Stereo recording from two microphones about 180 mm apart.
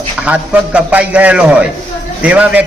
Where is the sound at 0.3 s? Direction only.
10° right (ahead or behind).